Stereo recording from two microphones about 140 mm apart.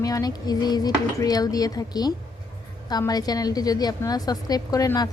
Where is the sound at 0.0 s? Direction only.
25° left (ahead or behind).